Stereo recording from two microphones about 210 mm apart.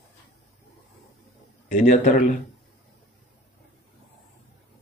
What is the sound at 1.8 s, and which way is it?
Speech, 40° left (ahead or behind).